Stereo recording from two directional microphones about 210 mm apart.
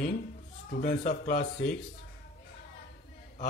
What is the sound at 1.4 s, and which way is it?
Speech, 55° left (ahead or behind).